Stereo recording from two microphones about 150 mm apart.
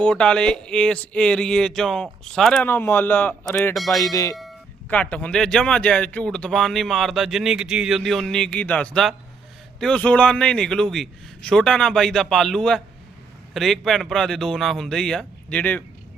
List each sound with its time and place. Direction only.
0.0 s speech: 5° left (ahead or behind)
3.8 s speech: centre (ahead or behind)
4.0 s speech: 25° left (ahead or behind)
4.9 s speech: 10° left (ahead or behind)